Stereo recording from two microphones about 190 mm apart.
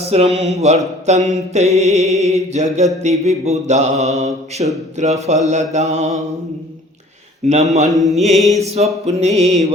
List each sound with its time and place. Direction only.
0.0 s speech: 35° right (ahead or behind)
0.3 s music: 35° right (ahead or behind)
7.4 s music: 35° right (ahead or behind)
7.9 s mantra: centre (ahead or behind)
8.4 s music: 35° right (ahead or behind)